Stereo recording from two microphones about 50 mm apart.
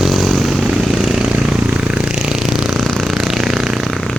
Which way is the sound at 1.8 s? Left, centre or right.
Centre.